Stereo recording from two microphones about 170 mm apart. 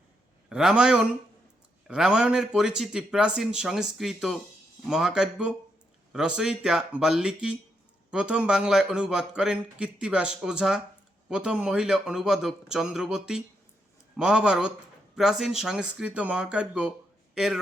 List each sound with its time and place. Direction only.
0.5 s a man's voice: 5° right (ahead or behind)